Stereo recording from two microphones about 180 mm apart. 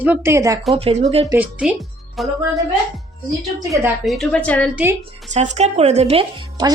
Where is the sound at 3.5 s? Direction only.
15° right (ahead or behind).